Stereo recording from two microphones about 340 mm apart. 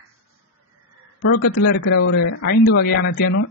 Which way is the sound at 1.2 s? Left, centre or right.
Left.